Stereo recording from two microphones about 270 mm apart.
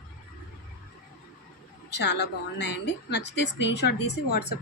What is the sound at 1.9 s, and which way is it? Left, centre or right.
A woman's voice, left.